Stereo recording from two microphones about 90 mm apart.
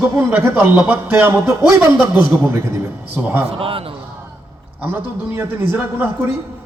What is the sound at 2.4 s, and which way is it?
A man's voice, 30° right (ahead or behind).